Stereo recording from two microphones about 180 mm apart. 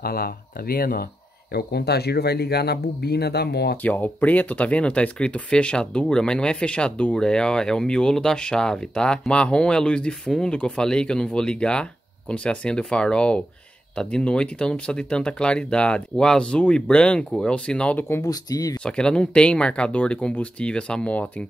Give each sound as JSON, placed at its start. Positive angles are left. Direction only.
{"t": 0.0, "sound": "speech", "side_deg": 55}
{"t": 3.8, "sound": "speech", "side_deg": 10}
{"t": 18.8, "sound": "speech", "side_deg": 5}